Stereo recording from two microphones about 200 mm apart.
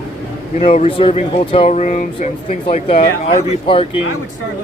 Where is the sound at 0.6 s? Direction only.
35° left (ahead or behind).